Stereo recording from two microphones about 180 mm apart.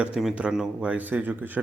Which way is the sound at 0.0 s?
5° right (ahead or behind).